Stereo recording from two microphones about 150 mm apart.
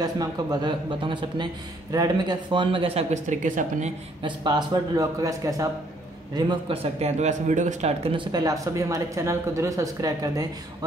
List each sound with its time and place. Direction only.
0.0 s a man's voice: 25° right (ahead or behind); by 3.9 s 55° right (ahead or behind)
4.2 s speech: 30° right (ahead or behind); by 7.9 s 55° right (ahead or behind)
8.0 s speech: 35° right (ahead or behind)